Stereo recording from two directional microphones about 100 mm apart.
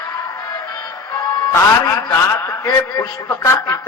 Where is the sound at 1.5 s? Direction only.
30° left (ahead or behind).